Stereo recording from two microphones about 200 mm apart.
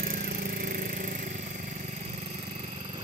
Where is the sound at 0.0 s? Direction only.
45° right (ahead or behind).